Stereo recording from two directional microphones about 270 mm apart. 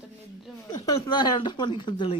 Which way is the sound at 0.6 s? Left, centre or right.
Centre.